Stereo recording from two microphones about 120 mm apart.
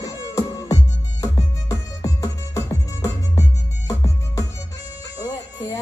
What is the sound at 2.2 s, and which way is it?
Music, 30° left (ahead or behind).